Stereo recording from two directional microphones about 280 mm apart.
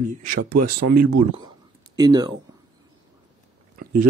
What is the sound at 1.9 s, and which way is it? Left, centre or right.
Speech, centre.